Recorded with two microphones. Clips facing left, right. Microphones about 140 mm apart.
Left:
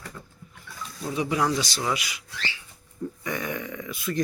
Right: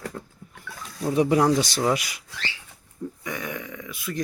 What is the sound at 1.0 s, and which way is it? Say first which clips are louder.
Speech: right 6 dB; 50° right (ahead or behind).